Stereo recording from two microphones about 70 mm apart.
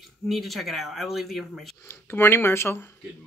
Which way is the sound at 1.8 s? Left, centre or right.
Left.